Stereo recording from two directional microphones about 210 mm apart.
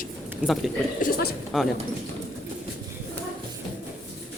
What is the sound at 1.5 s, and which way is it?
Speech, centre (ahead or behind).